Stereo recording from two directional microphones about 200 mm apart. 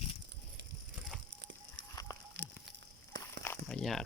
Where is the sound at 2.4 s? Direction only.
65° right (ahead or behind).